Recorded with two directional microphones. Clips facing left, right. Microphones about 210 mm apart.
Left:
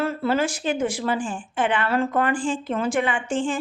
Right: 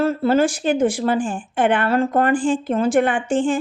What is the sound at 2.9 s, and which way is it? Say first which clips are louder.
Speech: right 7 dB; 55° right (ahead or behind).